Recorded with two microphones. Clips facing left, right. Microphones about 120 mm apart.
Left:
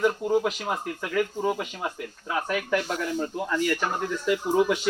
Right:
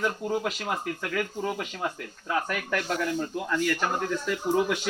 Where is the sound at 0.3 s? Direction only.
5° left (ahead or behind).